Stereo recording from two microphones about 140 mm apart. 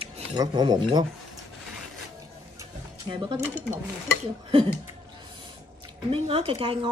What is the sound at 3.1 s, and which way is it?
Speech, 35° right (ahead or behind).